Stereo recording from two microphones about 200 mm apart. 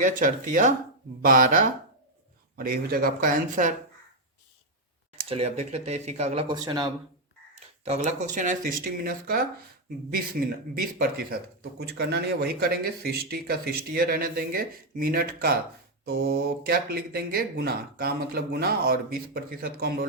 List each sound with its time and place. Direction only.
0.0 s speech: 40° right (ahead or behind)
5.3 s speech: 30° right (ahead or behind)
7.9 s speech: 35° right (ahead or behind)